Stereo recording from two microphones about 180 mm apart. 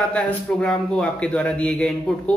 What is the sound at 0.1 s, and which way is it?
A man's voice, 5° left (ahead or behind).